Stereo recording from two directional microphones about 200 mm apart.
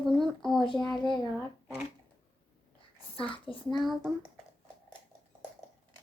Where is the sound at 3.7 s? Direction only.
Centre (ahead or behind).